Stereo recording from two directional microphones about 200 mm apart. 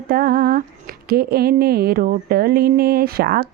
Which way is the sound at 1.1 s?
50° right (ahead or behind).